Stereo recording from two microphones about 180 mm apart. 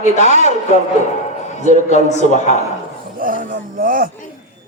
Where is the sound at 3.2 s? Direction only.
50° right (ahead or behind).